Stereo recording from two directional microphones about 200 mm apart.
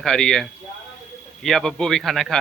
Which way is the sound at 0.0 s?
5° left (ahead or behind).